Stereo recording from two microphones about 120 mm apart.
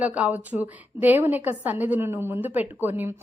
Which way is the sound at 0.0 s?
10° right (ahead or behind).